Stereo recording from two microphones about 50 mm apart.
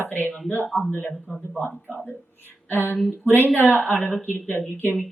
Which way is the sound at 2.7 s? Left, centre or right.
Left.